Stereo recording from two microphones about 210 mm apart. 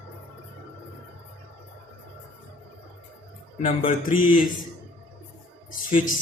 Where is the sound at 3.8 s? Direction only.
40° left (ahead or behind).